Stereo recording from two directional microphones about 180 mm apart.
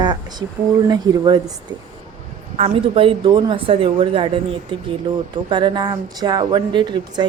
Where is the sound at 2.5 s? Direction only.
35° right (ahead or behind).